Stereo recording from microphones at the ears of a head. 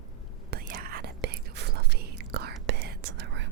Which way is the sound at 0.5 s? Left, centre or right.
Right.